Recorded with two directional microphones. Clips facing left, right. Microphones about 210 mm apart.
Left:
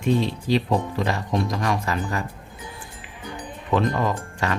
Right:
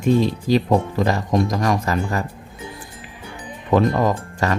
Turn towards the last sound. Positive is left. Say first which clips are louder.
# right 5 dB
turn(degrees=-40)  # may be behind; listen again after turning